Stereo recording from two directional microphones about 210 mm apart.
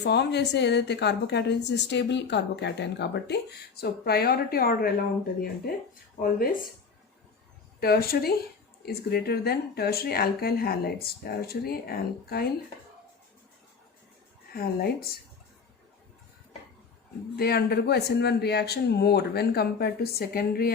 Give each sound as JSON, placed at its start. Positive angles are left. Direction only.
{"t": 0.0, "sound": "a woman's voice", "side_deg": 55}
{"t": 6.1, "sound": "a woman's voice", "side_deg": 45}
{"t": 7.8, "sound": "a woman's voice", "side_deg": 45}
{"t": 14.5, "sound": "a woman's voice", "side_deg": 45}
{"t": 17.3, "sound": "a woman's voice", "side_deg": 50}